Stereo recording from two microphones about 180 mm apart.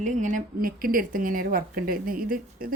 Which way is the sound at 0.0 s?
45° right (ahead or behind).